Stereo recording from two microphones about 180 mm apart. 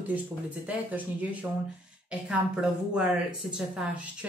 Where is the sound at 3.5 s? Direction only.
5° right (ahead or behind).